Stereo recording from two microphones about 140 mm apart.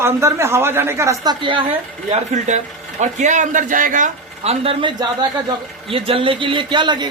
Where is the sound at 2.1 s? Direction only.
55° right (ahead or behind).